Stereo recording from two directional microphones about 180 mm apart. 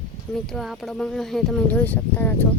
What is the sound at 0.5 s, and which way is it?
Speech, centre (ahead or behind).